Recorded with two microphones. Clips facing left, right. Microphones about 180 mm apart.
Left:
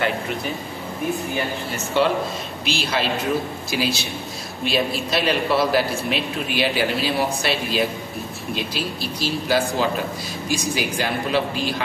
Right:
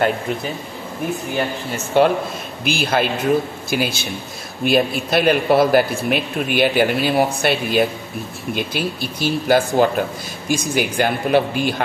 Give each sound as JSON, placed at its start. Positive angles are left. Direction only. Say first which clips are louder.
{"t": 2.0, "sound": "a man's voice", "louder": "right 5 dB", "side_deg": -55}